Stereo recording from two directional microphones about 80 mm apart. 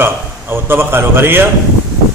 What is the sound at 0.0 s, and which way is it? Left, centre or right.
A man's voice, right.